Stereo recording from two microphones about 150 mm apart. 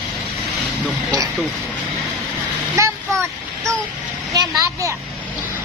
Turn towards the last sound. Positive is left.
turn(degrees=-25)  # may be behind; listen again after turning